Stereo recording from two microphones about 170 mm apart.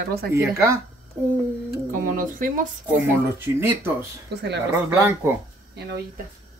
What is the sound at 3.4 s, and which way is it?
Speech, 15° right (ahead or behind).